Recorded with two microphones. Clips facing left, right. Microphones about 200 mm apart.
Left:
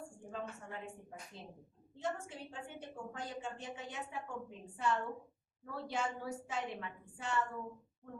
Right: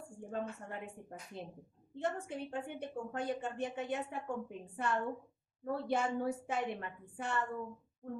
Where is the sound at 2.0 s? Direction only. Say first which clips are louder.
Right 4 dB; 60° right (ahead or behind).